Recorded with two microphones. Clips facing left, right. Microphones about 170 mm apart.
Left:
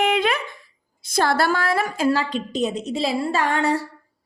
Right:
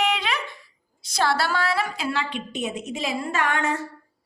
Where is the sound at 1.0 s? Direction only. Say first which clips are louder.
Left 3 dB; 50° left (ahead or behind); by 3.9 s 35° left (ahead or behind).